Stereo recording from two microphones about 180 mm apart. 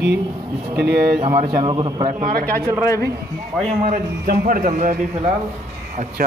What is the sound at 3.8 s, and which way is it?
A man's voice, 45° right (ahead or behind).